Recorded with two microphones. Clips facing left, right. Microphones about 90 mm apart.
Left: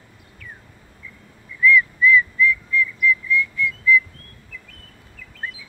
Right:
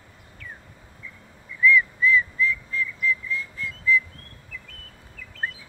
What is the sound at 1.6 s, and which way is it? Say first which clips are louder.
Whistling: left 3 dB; 30° right (ahead or behind).